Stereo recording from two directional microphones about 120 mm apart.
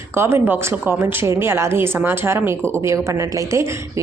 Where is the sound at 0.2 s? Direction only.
20° right (ahead or behind).